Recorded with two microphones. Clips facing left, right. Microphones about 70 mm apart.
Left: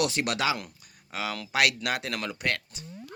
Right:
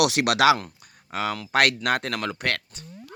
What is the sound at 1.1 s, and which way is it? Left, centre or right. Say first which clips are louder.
A man's voice: right 5 dB; right.